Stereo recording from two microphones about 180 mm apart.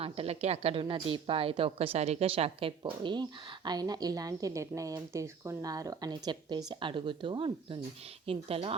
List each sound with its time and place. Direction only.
0.0 s a woman's voice: 35° right (ahead or behind)